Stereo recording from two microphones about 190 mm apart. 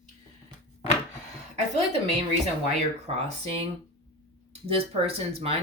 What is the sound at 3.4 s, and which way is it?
Speech, 30° right (ahead or behind).